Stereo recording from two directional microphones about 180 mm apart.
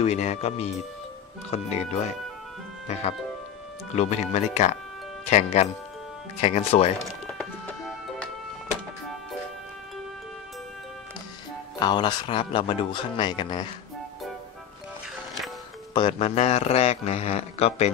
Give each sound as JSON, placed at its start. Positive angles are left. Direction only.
{"t": 0.0, "sound": "a man's voice", "side_deg": 40}
{"t": 7.2, "sound": "music", "side_deg": 5}
{"t": 11.8, "sound": "speech", "side_deg": 25}
{"t": 15.9, "sound": "a man's voice", "side_deg": 30}